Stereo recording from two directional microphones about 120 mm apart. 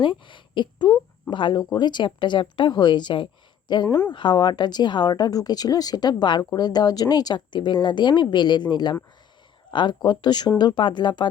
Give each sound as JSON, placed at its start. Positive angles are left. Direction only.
{"t": 0.0, "sound": "speech", "side_deg": 40}
{"t": 3.8, "sound": "speech", "side_deg": 20}
{"t": 4.1, "sound": "speech", "side_deg": 40}